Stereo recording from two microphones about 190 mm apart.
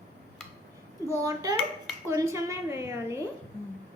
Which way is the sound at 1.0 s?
15° right (ahead or behind).